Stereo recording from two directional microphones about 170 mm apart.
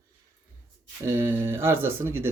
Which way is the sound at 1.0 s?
15° right (ahead or behind).